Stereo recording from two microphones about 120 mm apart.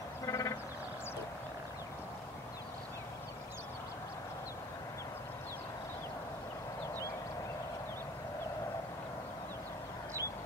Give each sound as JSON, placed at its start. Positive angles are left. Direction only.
{"t": 0.3, "sound": "sheep", "side_deg": 25}